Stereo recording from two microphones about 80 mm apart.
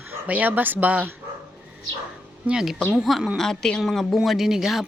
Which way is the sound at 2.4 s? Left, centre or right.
Centre.